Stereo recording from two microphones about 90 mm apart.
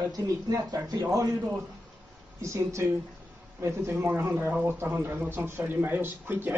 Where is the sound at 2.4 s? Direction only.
35° right (ahead or behind).